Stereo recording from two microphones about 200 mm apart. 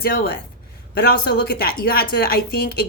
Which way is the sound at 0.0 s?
50° left (ahead or behind).